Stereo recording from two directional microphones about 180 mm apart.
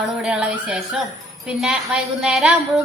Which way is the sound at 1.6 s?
5° right (ahead or behind).